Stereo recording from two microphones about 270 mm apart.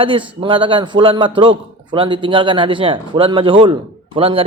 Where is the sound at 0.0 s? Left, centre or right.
Centre.